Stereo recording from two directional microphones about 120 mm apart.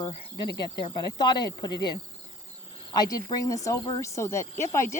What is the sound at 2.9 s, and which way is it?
Speech, 35° left (ahead or behind).